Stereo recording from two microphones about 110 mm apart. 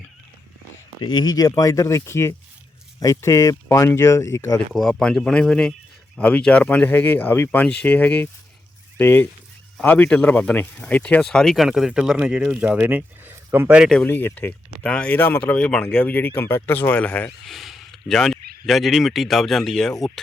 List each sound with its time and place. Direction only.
1.0 s speech: 40° left (ahead or behind)
4.7 s speech: centre (ahead or behind); by 13.7 s 20° right (ahead or behind)
13.9 s speech: 15° left (ahead or behind)
16.0 s speech: 15° left (ahead or behind)
17.4 s speech: centre (ahead or behind)